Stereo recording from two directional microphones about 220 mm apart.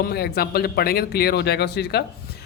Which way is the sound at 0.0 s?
45° left (ahead or behind).